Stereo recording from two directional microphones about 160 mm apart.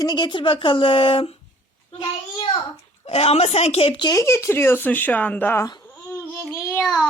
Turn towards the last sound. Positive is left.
turn(degrees=15)  # may be behind; listen again after turning